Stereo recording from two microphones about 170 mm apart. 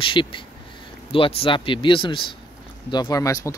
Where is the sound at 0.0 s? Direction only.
30° left (ahead or behind).